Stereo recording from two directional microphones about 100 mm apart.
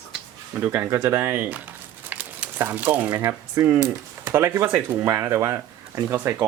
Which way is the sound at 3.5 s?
30° right (ahead or behind).